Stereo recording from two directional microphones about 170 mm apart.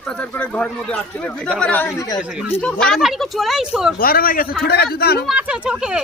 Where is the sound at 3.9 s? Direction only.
60° left (ahead or behind).